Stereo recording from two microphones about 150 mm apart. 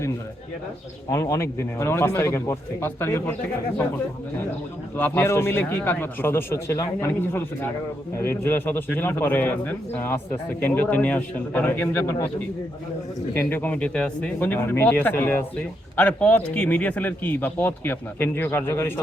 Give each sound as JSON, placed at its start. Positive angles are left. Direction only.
{"t": 1.1, "sound": "speech", "side_deg": 20}
{"t": 4.9, "sound": "speech", "side_deg": 15}
{"t": 13.5, "sound": "speech", "side_deg": 10}